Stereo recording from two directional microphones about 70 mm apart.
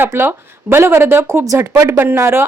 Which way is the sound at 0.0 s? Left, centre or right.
Right.